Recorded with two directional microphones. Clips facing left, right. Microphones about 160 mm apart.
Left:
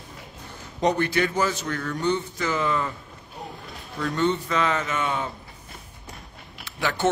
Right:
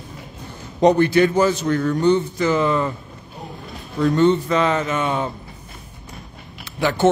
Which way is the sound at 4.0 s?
30° right (ahead or behind).